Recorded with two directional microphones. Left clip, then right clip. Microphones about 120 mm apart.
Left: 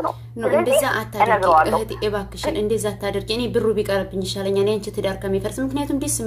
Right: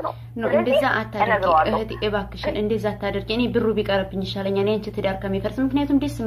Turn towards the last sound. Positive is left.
turn(degrees=10)  # may be behind; listen again after turning